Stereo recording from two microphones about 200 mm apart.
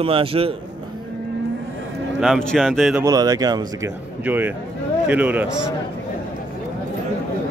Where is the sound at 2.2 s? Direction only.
Centre (ahead or behind).